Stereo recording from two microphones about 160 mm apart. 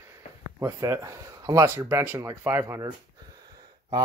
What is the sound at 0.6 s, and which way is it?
Speech, 20° right (ahead or behind).